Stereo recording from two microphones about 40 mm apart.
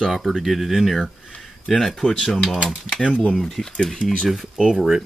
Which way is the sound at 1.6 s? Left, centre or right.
Centre.